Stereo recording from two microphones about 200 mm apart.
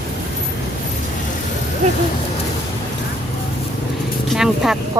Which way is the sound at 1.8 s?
35° right (ahead or behind).